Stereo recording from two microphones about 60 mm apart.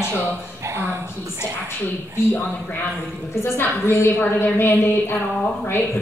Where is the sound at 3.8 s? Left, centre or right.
Left.